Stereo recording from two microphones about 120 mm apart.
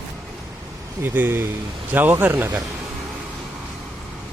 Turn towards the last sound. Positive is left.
turn(degrees=-15)  # may be behind; listen again after turning